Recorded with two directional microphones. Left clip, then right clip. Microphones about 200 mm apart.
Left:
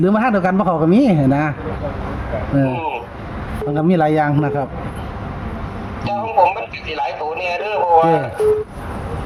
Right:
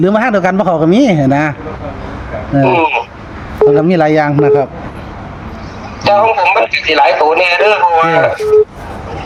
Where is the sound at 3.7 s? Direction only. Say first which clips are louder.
Right 1 dB; 25° right (ahead or behind).